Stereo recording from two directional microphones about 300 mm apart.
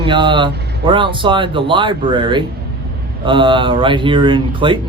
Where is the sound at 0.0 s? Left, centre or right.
Centre.